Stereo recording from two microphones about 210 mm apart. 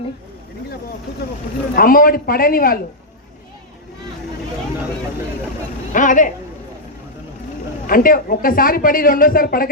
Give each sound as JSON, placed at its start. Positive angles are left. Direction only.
{"t": 1.7, "sound": "speech", "side_deg": 45}
{"t": 5.9, "sound": "speech", "side_deg": 40}
{"t": 7.9, "sound": "speech", "side_deg": 40}